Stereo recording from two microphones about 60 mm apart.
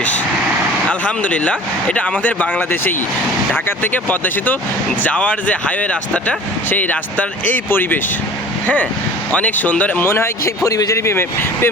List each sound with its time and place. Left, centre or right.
0.9 s speech: left
10.0 s speech: left
10.6 s speech: left
10.9 s speech: left